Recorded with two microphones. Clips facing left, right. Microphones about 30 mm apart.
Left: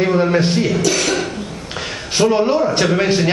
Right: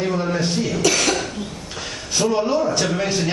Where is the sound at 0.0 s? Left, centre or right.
Left.